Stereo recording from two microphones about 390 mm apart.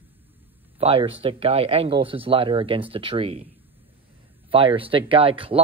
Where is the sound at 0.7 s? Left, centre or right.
Centre.